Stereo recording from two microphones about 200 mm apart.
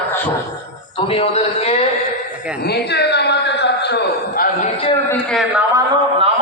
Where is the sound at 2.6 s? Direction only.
55° left (ahead or behind).